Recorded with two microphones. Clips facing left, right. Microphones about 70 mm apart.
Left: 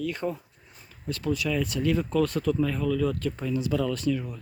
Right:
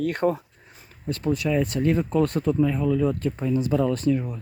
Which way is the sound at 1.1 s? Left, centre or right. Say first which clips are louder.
Right 4 dB; right.